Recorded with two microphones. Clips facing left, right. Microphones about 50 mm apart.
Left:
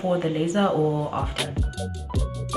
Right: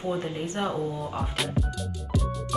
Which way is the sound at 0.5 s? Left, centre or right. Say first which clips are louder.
Left 7 dB; left.